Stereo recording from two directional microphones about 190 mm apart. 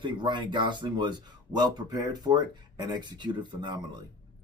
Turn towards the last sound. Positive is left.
turn(degrees=-25)  # may be behind; listen again after turning